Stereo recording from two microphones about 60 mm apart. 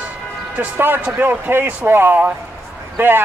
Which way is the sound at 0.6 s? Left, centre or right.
Right.